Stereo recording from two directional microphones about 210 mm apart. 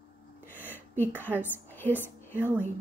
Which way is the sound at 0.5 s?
10° left (ahead or behind).